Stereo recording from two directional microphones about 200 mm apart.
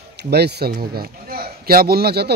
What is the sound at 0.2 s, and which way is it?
A man's voice, 55° right (ahead or behind).